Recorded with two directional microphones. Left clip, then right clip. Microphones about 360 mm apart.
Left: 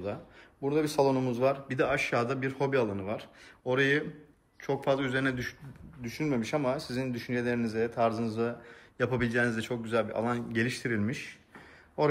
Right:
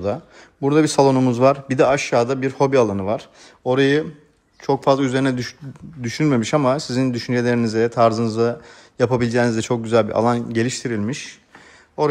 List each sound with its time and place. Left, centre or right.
0.7 s speech: right